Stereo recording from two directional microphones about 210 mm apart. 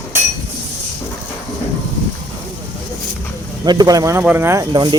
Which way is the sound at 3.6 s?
20° right (ahead or behind).